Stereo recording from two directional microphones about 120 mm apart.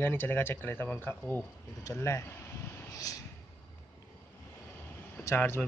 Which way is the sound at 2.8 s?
30° left (ahead or behind).